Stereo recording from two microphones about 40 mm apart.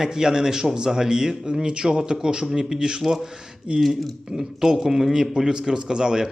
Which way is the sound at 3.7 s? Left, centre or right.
Right.